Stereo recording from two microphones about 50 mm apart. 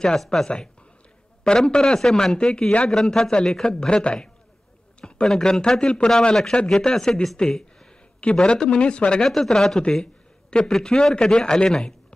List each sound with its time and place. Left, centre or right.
0.2 s speech: centre
8.2 s speech: left
9.2 s speech: centre